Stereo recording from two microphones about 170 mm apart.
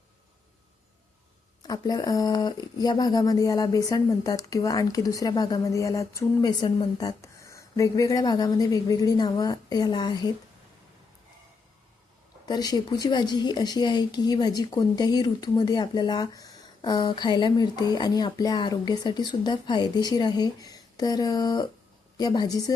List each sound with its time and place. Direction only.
1.6 s a woman's voice: 25° left (ahead or behind)
12.5 s a woman's voice: 25° left (ahead or behind)